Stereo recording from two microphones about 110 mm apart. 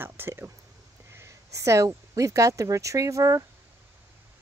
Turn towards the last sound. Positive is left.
turn(degrees=-30)  # may be behind; listen again after turning